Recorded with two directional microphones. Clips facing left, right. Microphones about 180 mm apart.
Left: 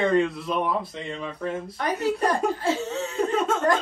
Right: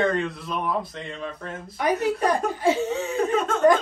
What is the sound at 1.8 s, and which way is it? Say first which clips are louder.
Laughter: right 2 dB; 10° right (ahead or behind).